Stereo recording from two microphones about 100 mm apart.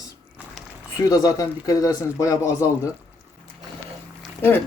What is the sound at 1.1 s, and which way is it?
Speech, 35° left (ahead or behind).